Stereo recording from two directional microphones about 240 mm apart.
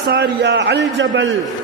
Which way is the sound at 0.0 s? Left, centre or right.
Right.